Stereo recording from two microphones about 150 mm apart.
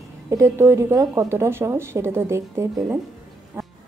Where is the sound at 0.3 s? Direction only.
20° right (ahead or behind).